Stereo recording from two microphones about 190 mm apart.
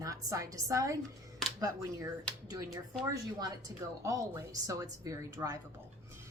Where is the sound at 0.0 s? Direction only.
15° right (ahead or behind).